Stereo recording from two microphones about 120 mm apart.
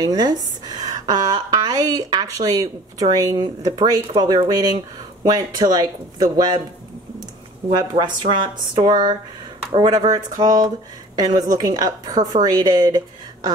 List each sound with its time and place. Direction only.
0.0 s a woman's voice: 35° right (ahead or behind)
8.0 s a woman's voice: 40° right (ahead or behind)